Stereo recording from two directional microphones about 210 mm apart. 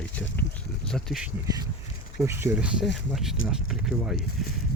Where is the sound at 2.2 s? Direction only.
10° right (ahead or behind).